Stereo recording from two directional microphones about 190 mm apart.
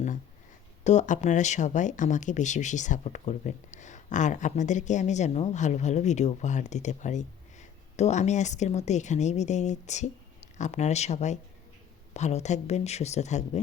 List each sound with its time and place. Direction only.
0.9 s speech: 40° left (ahead or behind)